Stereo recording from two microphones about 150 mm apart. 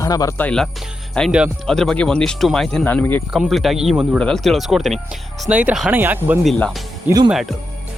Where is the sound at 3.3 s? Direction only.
Centre (ahead or behind).